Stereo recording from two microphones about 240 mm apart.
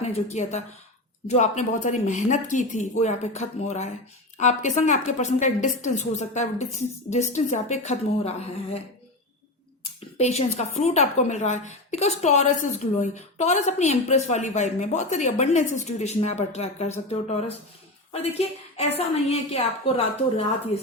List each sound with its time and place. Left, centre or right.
0.0 s a woman's voice: left
10.2 s a woman's voice: left